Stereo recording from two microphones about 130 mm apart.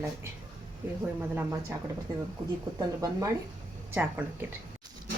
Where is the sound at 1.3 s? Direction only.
20° right (ahead or behind).